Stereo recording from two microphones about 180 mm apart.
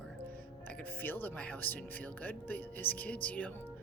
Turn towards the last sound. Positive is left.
turn(degrees=10)  # may be behind; listen again after turning